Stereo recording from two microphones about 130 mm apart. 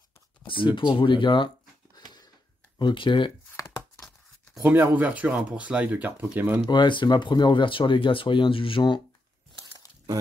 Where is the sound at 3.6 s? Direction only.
25° left (ahead or behind).